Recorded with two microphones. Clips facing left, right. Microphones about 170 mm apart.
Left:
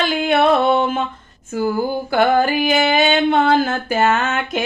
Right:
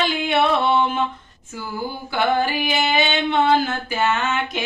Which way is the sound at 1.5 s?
50° left (ahead or behind).